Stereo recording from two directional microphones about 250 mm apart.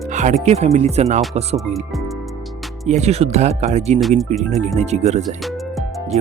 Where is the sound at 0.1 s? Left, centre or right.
Right.